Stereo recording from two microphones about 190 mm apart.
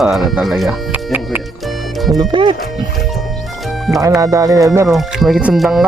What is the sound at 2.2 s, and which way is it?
Speech, 25° right (ahead or behind).